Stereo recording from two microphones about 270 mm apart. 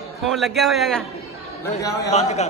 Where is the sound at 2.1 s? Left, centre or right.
Left.